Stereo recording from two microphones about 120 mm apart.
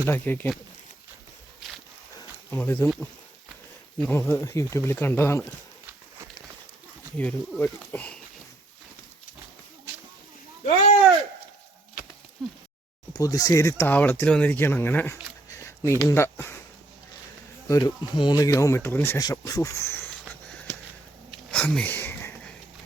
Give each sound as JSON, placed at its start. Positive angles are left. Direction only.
{"t": 0.0, "sound": "speech", "side_deg": 15}
{"t": 2.5, "sound": "speech", "side_deg": 15}
{"t": 3.9, "sound": "speech", "side_deg": 10}
{"t": 7.2, "sound": "speech", "side_deg": 10}
{"t": 12.4, "sound": "speech", "side_deg": 5}
{"t": 13.1, "sound": "speech", "side_deg": 30}
{"t": 15.4, "sound": "a sound", "side_deg": 25}
{"t": 16.0, "sound": "speech", "side_deg": 20}
{"t": 17.7, "sound": "speech", "side_deg": 35}
{"t": 19.2, "sound": "speech", "side_deg": 30}
{"t": 21.5, "sound": "sniff", "side_deg": 10}